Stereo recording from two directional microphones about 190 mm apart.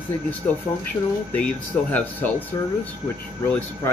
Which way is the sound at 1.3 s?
10° left (ahead or behind).